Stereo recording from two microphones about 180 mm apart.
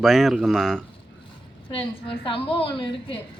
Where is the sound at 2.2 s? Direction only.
30° left (ahead or behind).